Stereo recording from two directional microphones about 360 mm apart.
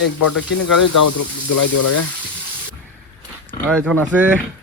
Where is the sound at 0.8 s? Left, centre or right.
Left.